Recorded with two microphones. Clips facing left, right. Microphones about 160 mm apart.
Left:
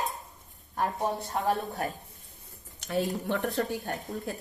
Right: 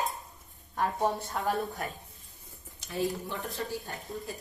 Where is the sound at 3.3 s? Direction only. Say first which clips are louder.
Left 7 dB; 70° left (ahead or behind).